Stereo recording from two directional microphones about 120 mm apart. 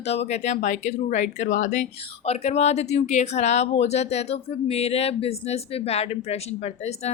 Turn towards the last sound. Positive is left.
turn(degrees=65)  # may be behind; listen again after turning